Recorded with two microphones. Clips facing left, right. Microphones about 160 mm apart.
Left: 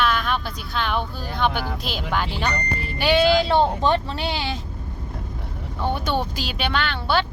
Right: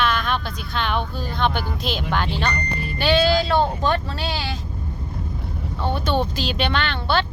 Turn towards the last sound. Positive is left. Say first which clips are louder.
# even
turn(degrees=5)  # may be behind; listen again after turning